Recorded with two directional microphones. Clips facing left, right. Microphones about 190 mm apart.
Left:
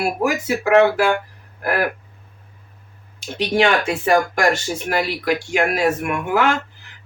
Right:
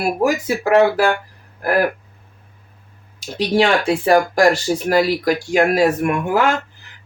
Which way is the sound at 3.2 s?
35° right (ahead or behind).